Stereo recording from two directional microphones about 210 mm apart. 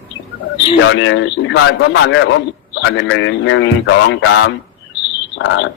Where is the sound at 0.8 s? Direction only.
60° left (ahead or behind).